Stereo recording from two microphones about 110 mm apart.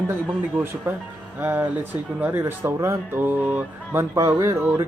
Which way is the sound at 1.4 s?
20° right (ahead or behind).